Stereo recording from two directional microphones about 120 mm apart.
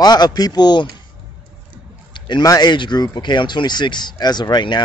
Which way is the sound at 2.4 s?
30° left (ahead or behind).